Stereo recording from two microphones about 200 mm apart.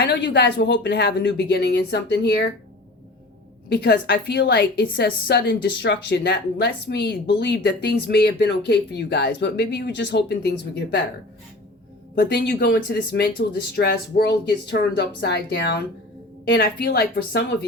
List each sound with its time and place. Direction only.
0.0 s a woman's voice: 60° left (ahead or behind)
3.7 s a woman's voice: 55° left (ahead or behind)
12.1 s a woman's voice: 55° left (ahead or behind)